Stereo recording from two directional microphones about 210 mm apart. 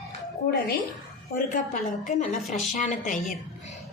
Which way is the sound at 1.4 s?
40° left (ahead or behind).